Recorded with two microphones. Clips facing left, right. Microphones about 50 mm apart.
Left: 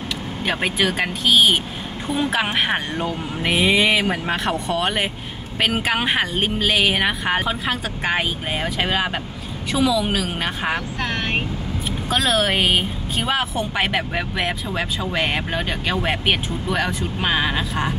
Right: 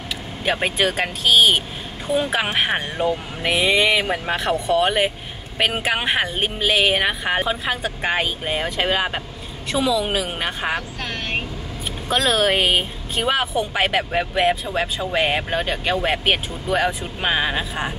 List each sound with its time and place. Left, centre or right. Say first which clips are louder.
0.5 s a woman's voice: right 1 dB; centre
11.0 s speech: left 4 dB; left
12.1 s a woman's voice: right 1 dB; centre